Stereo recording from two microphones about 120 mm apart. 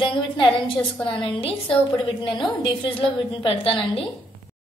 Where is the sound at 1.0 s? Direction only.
45° left (ahead or behind).